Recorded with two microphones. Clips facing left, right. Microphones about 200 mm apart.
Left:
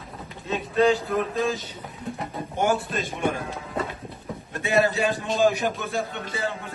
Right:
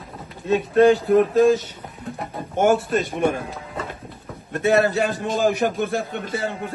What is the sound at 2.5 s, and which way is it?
Speech, 55° right (ahead or behind).